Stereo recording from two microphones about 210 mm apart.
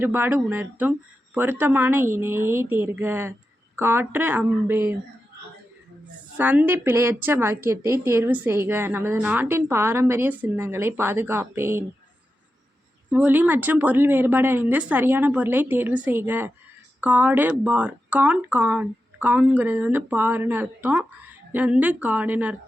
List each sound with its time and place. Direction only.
0.0 s a woman's voice: 10° right (ahead or behind)
6.3 s a woman's voice: 10° right (ahead or behind)
13.1 s a woman's voice: 10° right (ahead or behind)